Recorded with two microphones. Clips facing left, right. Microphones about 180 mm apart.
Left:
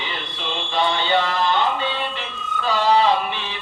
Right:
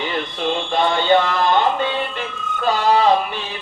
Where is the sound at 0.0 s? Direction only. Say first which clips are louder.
Right 8 dB; 50° right (ahead or behind).